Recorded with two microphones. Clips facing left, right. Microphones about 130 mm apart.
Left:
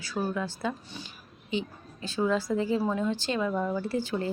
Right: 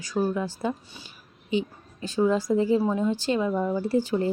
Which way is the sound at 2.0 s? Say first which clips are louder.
Right 4 dB; 15° right (ahead or behind).